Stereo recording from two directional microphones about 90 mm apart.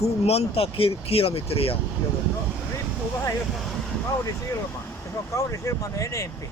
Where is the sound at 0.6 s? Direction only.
90° left.